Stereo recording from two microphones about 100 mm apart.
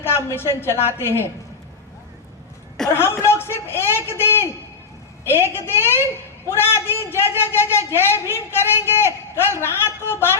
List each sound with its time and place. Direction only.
0.0 s a sound: 25° left (ahead or behind)
0.3 s a man's voice: 25° left (ahead or behind)
2.9 s a man's voice: 25° left (ahead or behind)